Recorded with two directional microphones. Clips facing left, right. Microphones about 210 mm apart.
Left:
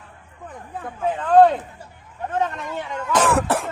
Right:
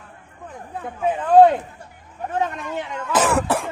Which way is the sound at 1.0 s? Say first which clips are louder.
Right 2 dB; 10° right (ahead or behind).